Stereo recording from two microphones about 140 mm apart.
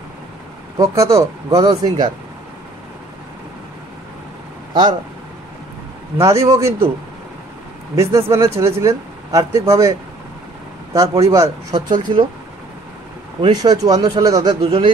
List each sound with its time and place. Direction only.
0.7 s speech: 20° right (ahead or behind)
6.1 s speech: 20° right (ahead or behind)
7.9 s speech: 20° right (ahead or behind)
13.4 s speech: 30° right (ahead or behind)